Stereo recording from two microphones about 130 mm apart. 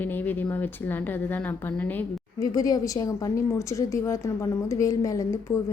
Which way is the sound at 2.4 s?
30° left (ahead or behind).